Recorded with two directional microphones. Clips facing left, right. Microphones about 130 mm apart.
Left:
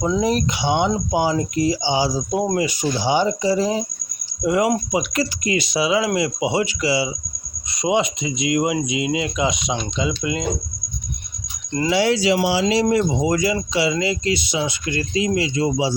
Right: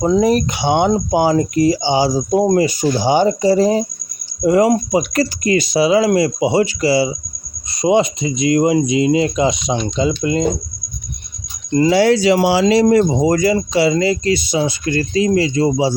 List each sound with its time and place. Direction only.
0.0 s speech: 50° right (ahead or behind)
2.4 s speech: 40° right (ahead or behind)
11.9 s speech: 45° right (ahead or behind)